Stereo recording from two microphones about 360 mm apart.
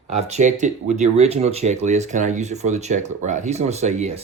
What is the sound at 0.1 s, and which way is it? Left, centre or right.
Speech, centre.